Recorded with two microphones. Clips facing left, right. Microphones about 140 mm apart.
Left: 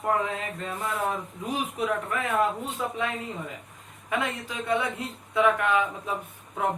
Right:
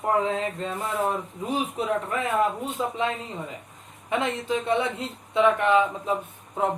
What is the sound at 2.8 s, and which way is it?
Speech, 20° right (ahead or behind).